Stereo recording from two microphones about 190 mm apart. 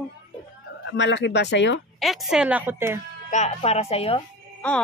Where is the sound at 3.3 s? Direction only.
35° left (ahead or behind).